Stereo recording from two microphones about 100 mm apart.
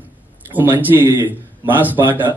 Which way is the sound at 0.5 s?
20° right (ahead or behind).